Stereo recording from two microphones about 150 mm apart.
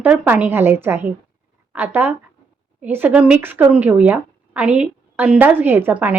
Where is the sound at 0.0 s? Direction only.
10° right (ahead or behind).